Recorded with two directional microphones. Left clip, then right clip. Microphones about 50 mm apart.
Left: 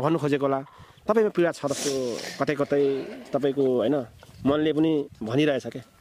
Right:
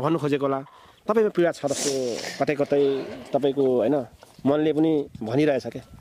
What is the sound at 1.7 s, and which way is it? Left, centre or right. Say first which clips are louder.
Speech: right 2 dB; right.